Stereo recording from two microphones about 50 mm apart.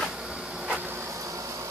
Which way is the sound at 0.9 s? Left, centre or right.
Right.